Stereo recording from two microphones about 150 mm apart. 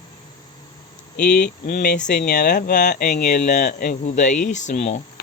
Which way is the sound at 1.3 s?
65° left (ahead or behind).